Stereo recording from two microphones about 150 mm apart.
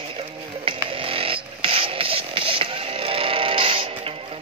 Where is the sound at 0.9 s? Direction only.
35° right (ahead or behind).